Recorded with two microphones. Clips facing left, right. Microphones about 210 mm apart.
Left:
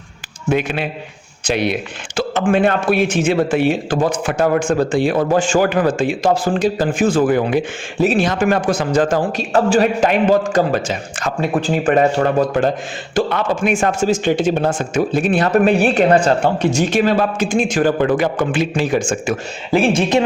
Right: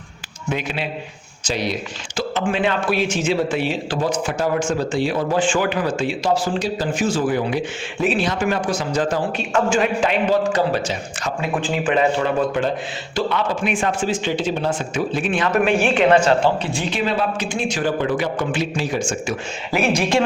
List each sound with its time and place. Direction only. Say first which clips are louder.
0.5 s a man's voice: left 6 dB; 55° left (ahead or behind)
7.9 s a man's voice: left 5 dB; 40° left (ahead or behind)
11.3 s a man's voice: left 5 dB; 40° left (ahead or behind); by 19.4 s 55° left (ahead or behind)
19.7 s speech: left 4 dB; 30° left (ahead or behind)